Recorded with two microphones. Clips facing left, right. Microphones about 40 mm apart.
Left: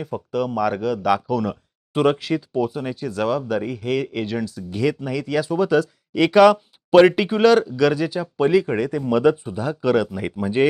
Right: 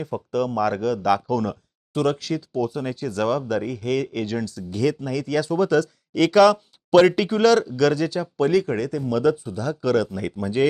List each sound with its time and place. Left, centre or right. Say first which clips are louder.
0.0 s speech: even; centre
1.9 s speech: left 4 dB; left